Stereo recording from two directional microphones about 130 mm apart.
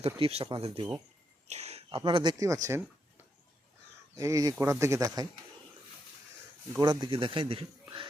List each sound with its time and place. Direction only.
0.0 s speech: 50° right (ahead or behind)
1.5 s speech: 55° right (ahead or behind); by 2.5 s 35° right (ahead or behind)
4.1 s speech: 25° right (ahead or behind)
4.5 s speech: 15° right (ahead or behind)
6.7 s a man's voice: 30° right (ahead or behind)